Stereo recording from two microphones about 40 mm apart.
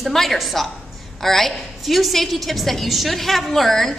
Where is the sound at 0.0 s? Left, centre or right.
Centre.